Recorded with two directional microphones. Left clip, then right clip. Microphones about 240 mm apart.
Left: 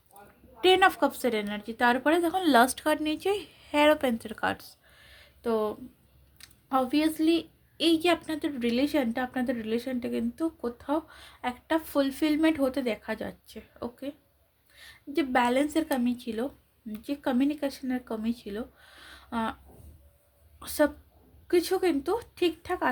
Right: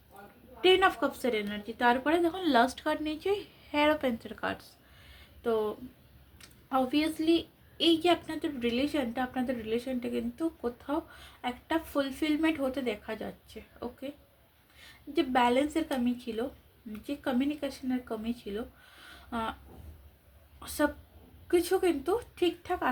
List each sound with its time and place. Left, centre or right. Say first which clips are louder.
0.6 s a woman's voice: left 3 dB; left
20.6 s a woman's voice: left 4 dB; left